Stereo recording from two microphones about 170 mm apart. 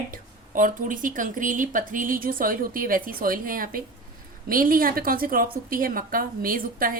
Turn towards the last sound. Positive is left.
turn(degrees=-55)  # may be behind; listen again after turning